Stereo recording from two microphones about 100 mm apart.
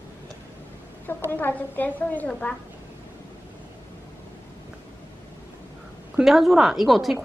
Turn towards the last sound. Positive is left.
turn(degrees=0)  # may be behind; listen again after turning